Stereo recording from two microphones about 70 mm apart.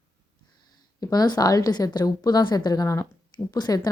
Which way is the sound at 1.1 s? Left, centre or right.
Left.